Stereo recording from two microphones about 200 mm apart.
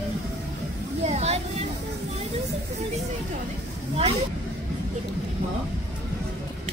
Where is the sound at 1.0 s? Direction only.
35° right (ahead or behind).